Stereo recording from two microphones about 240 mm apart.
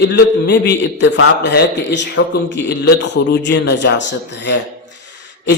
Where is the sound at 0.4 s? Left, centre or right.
Left.